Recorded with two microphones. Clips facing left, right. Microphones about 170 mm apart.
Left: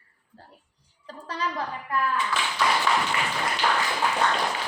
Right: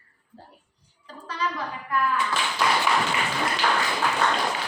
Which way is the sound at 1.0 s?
40° left (ahead or behind).